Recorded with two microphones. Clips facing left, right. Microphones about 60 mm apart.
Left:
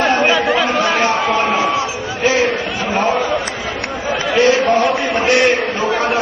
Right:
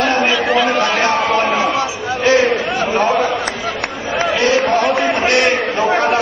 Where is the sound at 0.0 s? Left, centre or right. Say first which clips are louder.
Left 1 dB; left.